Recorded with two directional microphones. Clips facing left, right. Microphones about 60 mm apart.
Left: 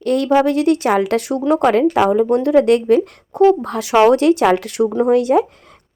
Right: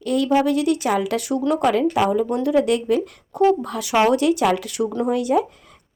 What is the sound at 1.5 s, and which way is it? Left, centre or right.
Speech, left.